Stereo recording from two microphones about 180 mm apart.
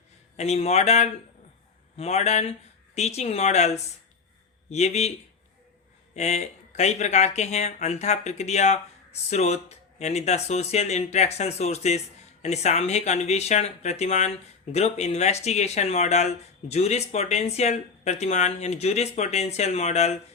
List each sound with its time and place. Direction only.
0.3 s speech: 35° left (ahead or behind)
6.1 s speech: 40° left (ahead or behind)